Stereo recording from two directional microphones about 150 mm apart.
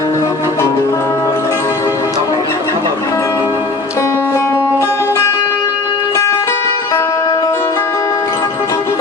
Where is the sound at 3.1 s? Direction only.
20° left (ahead or behind).